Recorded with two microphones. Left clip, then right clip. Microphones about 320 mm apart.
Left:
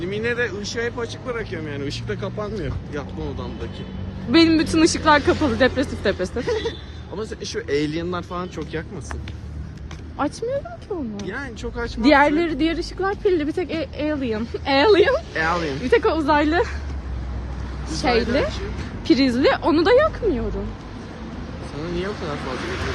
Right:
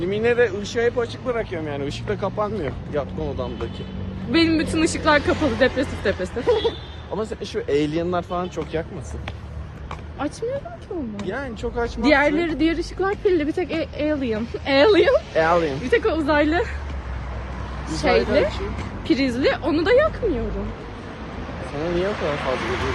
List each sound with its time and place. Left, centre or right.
0.0 s speech: centre
1.3 s speech: centre
4.3 s a woman's voice: centre
6.4 s speech: centre
10.2 s a woman's voice: centre
11.2 s speech: centre
12.0 s a woman's voice: centre
15.4 s speech: centre
15.8 s a woman's voice: centre
17.9 s a woman's voice: centre
21.8 s speech: right